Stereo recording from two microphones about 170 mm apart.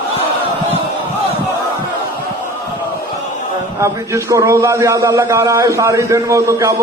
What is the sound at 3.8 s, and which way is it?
A man's voice, 20° right (ahead or behind).